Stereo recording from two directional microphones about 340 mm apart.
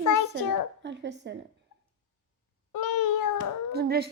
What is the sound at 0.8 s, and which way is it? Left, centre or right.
Speech, right.